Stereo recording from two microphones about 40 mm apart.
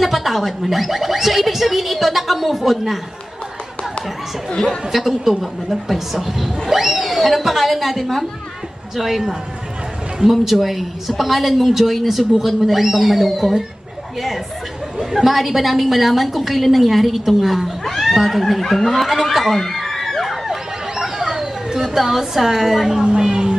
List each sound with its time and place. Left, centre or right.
0.0 s speech: centre
4.9 s speech: centre
15.0 s speech: centre
20.9 s a sound: centre
23.0 s speech: centre